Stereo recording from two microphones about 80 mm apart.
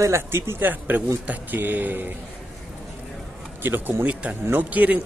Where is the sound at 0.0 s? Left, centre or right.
Right.